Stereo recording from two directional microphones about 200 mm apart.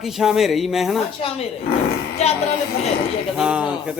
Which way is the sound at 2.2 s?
30° left (ahead or behind).